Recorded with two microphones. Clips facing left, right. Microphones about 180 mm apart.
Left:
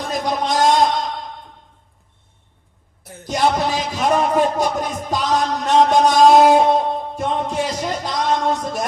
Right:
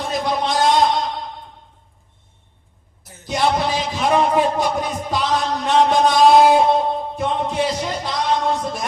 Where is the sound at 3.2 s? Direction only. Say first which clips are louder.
Left 1 dB; 45° left (ahead or behind).